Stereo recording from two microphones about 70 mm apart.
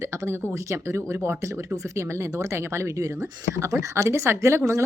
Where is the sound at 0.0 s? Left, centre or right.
Right.